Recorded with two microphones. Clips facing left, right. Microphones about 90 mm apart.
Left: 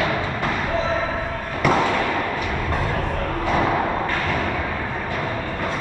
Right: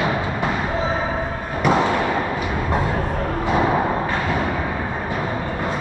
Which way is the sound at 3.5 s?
20° right (ahead or behind).